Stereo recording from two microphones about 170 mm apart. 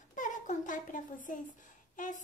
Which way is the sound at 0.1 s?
50° left (ahead or behind).